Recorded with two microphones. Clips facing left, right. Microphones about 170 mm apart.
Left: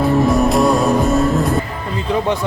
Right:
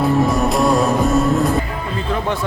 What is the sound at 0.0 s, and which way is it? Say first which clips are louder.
Music: left 2 dB; centre (ahead or behind).